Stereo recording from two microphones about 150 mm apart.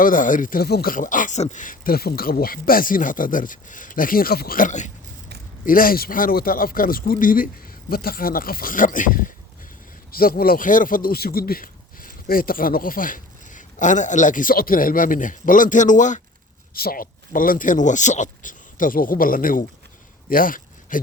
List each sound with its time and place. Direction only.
0.0 s a man's voice: 65° left (ahead or behind)
5.6 s a man's voice: 70° left (ahead or behind)
10.1 s a man's voice: 80° left; by 16.2 s 55° left (ahead or behind)
16.7 s a man's voice: 80° left